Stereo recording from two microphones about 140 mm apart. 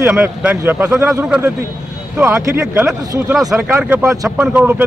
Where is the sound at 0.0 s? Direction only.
10° right (ahead or behind).